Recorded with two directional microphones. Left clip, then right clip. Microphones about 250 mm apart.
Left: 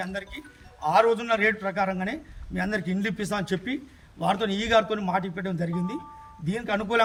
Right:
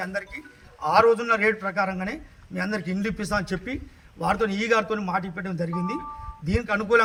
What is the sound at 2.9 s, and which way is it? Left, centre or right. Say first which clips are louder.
Speech: right 2 dB; centre.